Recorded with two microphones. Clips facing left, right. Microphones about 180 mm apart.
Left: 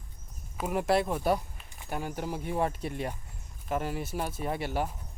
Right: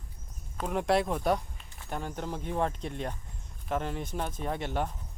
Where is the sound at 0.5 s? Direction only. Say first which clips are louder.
Even; 5° left (ahead or behind).